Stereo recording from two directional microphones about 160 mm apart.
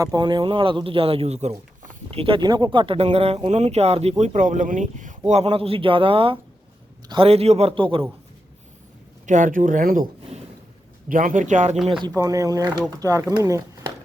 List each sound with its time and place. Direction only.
0.0 s speech: 25° right (ahead or behind); by 5.1 s 50° right (ahead or behind)
5.3 s speech: 35° right (ahead or behind)
9.2 s speech: 55° right (ahead or behind)
11.1 s speech: 55° right (ahead or behind)
11.9 s speech: 25° right (ahead or behind)